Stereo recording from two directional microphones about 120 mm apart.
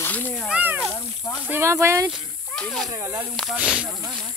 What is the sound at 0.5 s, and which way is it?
Cat, 10° right (ahead or behind).